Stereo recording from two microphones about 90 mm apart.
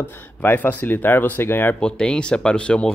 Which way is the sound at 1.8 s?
10° left (ahead or behind).